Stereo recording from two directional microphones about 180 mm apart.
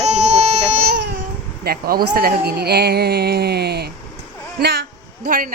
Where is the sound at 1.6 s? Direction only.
55° right (ahead or behind).